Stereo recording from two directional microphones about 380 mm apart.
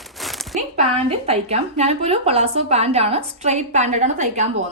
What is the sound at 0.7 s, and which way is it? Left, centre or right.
A woman's voice, centre.